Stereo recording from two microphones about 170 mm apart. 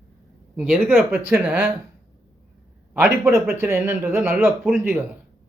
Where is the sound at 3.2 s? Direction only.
15° right (ahead or behind).